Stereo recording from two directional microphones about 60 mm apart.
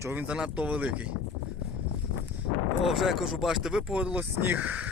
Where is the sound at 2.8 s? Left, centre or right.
Centre; by 4.9 s right.